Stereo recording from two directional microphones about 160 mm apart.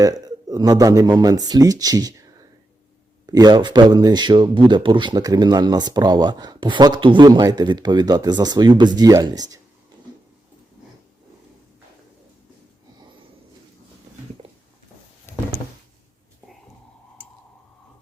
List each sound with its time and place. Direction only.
0.0 s speech: 25° right (ahead or behind)
3.2 s speech: 25° right (ahead or behind)